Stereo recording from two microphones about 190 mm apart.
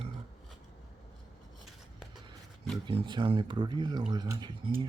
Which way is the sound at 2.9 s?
25° right (ahead or behind).